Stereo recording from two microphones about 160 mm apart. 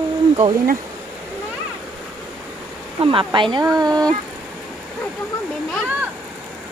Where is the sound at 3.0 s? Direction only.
35° right (ahead or behind).